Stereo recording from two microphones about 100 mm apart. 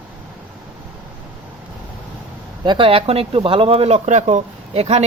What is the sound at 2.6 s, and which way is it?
Speech, 50° right (ahead or behind).